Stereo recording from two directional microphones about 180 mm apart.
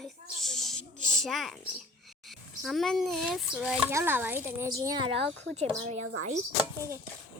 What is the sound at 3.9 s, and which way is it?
A child's voice, 15° right (ahead or behind).